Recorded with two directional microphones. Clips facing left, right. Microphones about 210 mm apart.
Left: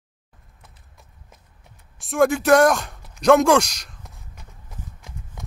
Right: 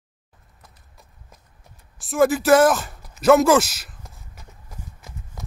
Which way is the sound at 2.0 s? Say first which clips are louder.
Even; centre (ahead or behind).